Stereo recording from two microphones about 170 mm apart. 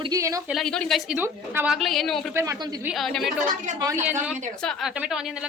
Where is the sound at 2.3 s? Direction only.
15° right (ahead or behind).